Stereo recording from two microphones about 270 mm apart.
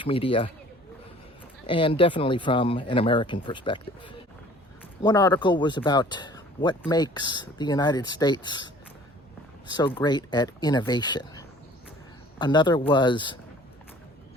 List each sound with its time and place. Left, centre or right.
0.0 s speech: centre
1.6 s speech: centre